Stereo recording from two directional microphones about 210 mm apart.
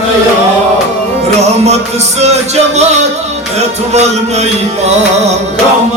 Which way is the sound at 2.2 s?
30° right (ahead or behind).